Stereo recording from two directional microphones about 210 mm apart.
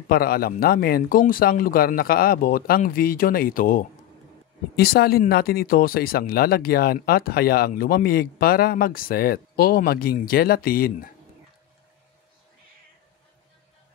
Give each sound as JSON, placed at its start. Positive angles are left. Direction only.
{"t": 0.1, "sound": "speech", "side_deg": 45}